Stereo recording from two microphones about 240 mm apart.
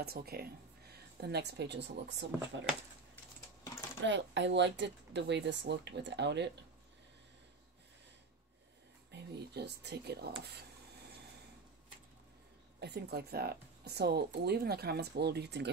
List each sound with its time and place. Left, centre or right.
0.0 s speech: right
4.0 s speech: right
9.1 s speech: right
12.8 s speech: right